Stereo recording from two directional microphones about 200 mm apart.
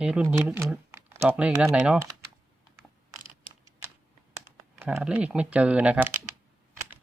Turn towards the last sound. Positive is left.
turn(degrees=-10)  # may be behind; listen again after turning